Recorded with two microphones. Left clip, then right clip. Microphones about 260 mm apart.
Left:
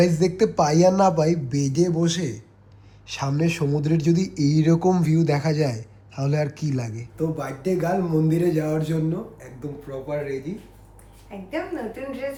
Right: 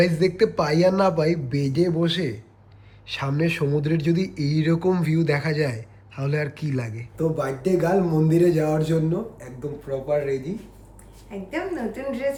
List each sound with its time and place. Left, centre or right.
0.0 s speech: centre
7.2 s speech: centre
11.3 s speech: centre